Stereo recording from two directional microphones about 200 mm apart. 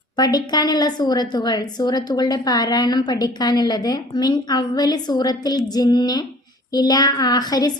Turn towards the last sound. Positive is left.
turn(degrees=20)  # may be behind; listen again after turning